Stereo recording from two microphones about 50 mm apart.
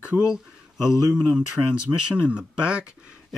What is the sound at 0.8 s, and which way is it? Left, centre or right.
Speech, centre.